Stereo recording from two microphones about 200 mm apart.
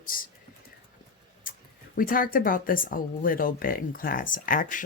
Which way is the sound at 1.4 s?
45° left (ahead or behind).